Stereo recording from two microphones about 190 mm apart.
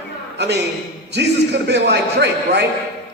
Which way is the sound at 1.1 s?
65° right (ahead or behind).